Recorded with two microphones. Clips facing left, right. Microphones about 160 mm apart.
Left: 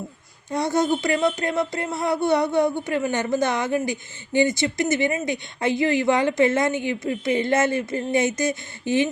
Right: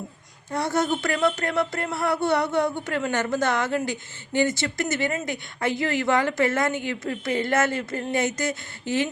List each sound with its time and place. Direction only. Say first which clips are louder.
0.5 s speech: left 3 dB; 15° left (ahead or behind)